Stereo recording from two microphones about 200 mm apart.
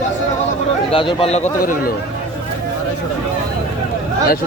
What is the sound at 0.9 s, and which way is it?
Speech, 25° left (ahead or behind).